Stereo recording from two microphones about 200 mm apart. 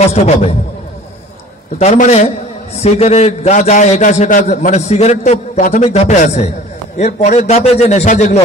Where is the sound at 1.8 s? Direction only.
35° left (ahead or behind).